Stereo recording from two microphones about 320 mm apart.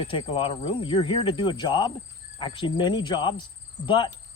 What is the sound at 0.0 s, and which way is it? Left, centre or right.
Speech, centre.